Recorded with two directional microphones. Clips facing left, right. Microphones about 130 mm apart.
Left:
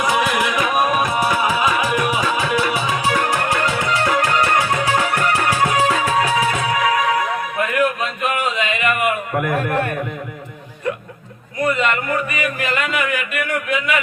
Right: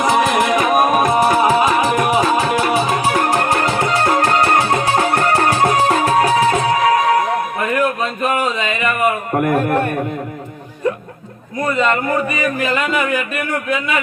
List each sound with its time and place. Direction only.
0.0 s music: 35° right (ahead or behind)
1.8 s music: 30° right (ahead or behind)
11.7 s speech: 35° right (ahead or behind)